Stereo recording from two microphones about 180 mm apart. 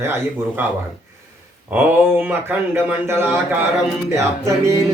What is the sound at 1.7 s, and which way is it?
A man's voice, 10° right (ahead or behind).